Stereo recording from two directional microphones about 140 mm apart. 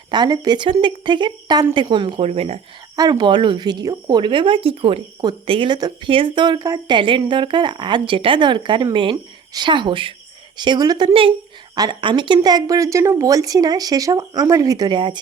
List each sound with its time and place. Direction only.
0.1 s speech: 30° right (ahead or behind); by 2.6 s 45° right (ahead or behind)
2.9 s a woman's voice: 30° right (ahead or behind)